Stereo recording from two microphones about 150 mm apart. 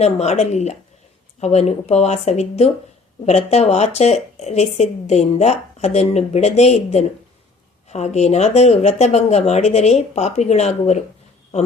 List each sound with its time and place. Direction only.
0.0 s speech: 45° left (ahead or behind)